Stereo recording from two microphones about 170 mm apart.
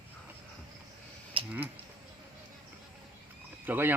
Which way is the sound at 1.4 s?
30° right (ahead or behind).